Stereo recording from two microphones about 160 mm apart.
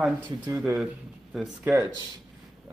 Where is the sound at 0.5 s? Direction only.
5° right (ahead or behind).